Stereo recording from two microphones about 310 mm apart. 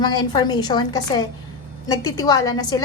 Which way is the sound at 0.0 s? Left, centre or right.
Centre.